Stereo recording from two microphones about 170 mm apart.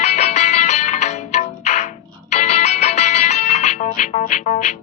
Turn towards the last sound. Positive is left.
turn(degrees=45)  # may be behind; listen again after turning